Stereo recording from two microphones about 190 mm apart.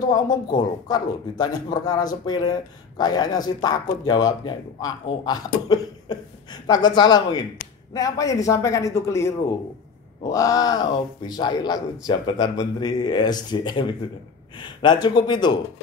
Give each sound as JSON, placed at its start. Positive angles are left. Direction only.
{"t": 0.1, "sound": "a man's voice", "side_deg": 20}
{"t": 10.3, "sound": "speech", "side_deg": 20}